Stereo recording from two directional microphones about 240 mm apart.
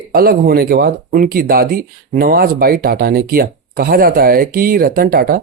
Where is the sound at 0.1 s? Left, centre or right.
Right.